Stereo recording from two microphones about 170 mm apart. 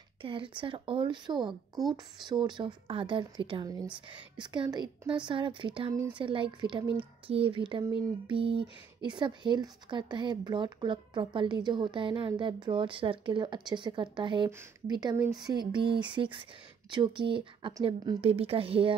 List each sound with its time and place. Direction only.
0.2 s speech: 30° right (ahead or behind)
1.5 s a woman's voice: centre (ahead or behind)
2.2 s speech: 25° right (ahead or behind)